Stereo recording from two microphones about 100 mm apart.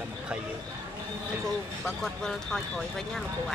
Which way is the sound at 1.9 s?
5° left (ahead or behind).